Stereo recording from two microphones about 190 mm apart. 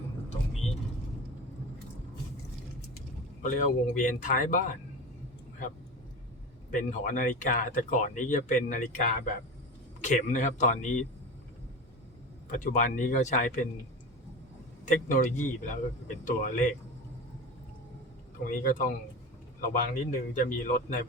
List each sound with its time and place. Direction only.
3.4 s speech: 40° left (ahead or behind)
6.7 s speech: 40° left (ahead or behind)
12.5 s speech: 40° left (ahead or behind)
14.8 s speech: 45° left (ahead or behind)
18.4 s speech: 45° left (ahead or behind)